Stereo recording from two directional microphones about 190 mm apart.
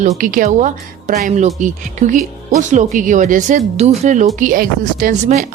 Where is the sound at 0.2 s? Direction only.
45° right (ahead or behind).